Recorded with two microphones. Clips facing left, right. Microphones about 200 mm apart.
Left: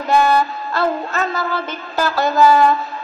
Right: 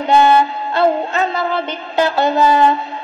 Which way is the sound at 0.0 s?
25° right (ahead or behind).